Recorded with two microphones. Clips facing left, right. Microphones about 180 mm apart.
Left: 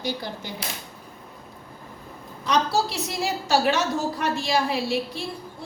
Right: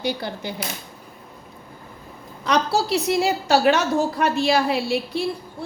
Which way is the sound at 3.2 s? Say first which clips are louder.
Right 1 dB; 65° right (ahead or behind).